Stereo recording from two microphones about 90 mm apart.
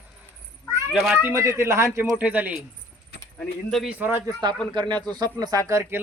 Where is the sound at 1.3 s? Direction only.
35° right (ahead or behind).